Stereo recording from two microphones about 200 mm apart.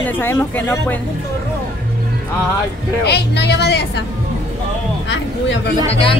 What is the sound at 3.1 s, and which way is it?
Speech, 55° left (ahead or behind).